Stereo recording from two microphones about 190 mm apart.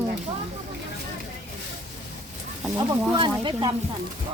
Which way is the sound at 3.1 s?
25° right (ahead or behind).